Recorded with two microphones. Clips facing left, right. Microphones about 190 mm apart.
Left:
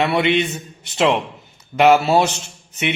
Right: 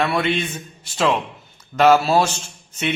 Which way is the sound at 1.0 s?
20° left (ahead or behind).